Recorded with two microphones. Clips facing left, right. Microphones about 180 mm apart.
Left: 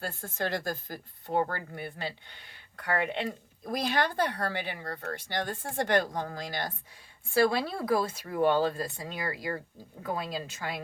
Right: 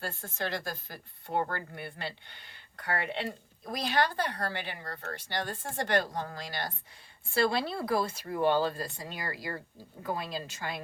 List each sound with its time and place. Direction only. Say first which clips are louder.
0.2 s speech: left 3 dB; 50° left (ahead or behind)
2.9 s speech: left 3 dB; 50° left (ahead or behind)